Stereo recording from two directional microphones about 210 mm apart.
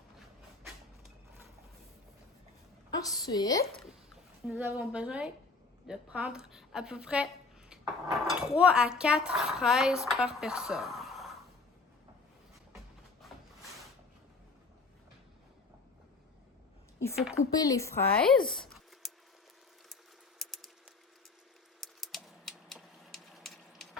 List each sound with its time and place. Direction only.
2.9 s a woman's voice: 20° left (ahead or behind)
4.4 s speech: 5° right (ahead or behind)
17.3 s speech: 15° left (ahead or behind)
18.5 s a sound: centre (ahead or behind)
20.4 s typing: centre (ahead or behind)
21.8 s typing: centre (ahead or behind)